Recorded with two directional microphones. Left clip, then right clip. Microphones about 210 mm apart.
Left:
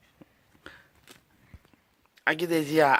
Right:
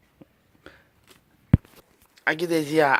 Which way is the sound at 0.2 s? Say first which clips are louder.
Right 3 dB; centre (ahead or behind).